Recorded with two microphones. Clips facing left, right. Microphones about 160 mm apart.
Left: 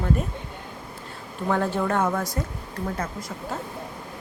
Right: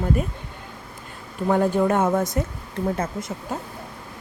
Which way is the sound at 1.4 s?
15° right (ahead or behind).